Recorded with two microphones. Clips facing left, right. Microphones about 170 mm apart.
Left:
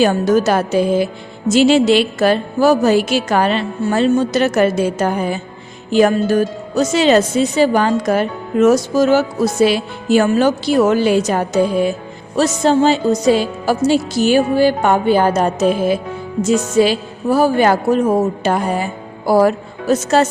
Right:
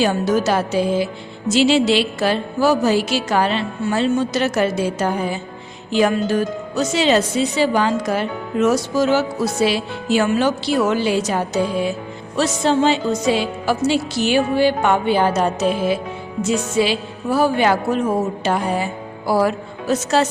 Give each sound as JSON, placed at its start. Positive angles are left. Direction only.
{"t": 0.0, "sound": "a woman's voice", "side_deg": 50}